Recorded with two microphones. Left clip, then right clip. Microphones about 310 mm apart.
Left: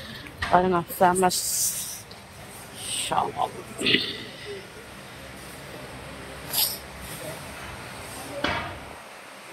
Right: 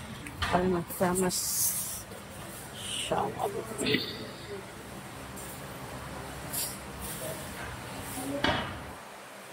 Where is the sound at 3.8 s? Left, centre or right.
Centre.